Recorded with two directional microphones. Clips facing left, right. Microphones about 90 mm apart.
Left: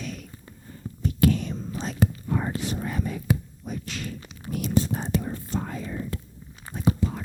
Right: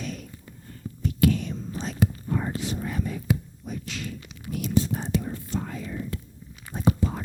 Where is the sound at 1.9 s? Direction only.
45° left (ahead or behind).